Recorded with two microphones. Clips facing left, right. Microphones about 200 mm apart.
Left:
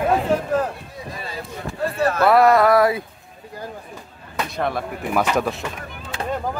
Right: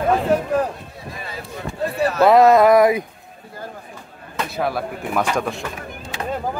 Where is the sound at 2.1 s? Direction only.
20° right (ahead or behind).